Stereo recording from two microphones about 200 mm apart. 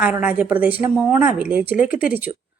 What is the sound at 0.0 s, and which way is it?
A woman's voice, 10° right (ahead or behind).